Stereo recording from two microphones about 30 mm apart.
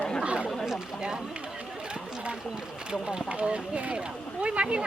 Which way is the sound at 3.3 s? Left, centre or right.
Right.